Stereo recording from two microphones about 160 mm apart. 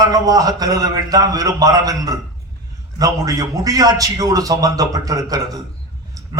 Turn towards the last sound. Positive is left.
turn(degrees=-20)  # may be behind; listen again after turning